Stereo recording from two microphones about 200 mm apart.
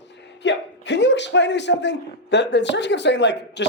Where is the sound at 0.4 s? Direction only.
60° left (ahead or behind).